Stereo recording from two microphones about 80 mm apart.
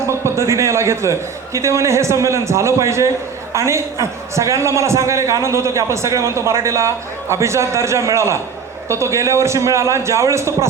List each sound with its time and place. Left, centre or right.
0.1 s a man's voice: right